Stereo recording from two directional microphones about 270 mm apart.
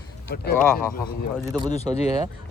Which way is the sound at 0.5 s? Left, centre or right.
Centre.